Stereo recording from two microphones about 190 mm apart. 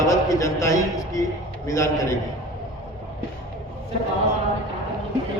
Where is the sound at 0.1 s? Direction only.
15° left (ahead or behind).